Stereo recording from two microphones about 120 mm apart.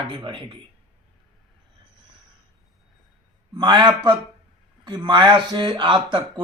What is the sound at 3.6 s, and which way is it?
Speech, 40° right (ahead or behind).